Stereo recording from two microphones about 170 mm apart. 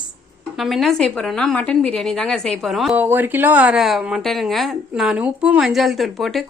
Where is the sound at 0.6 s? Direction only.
Centre (ahead or behind).